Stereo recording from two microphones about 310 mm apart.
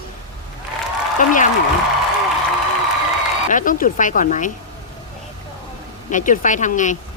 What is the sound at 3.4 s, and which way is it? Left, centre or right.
Speech, left.